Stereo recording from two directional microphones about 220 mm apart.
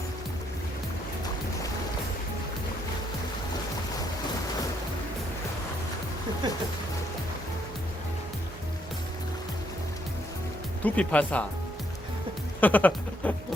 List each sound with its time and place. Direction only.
6.4 s music: 20° right (ahead or behind)
10.8 s speech: 5° left (ahead or behind)
12.5 s a sound: 10° left (ahead or behind)